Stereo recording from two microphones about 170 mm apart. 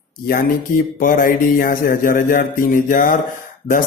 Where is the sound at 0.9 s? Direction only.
55° left (ahead or behind).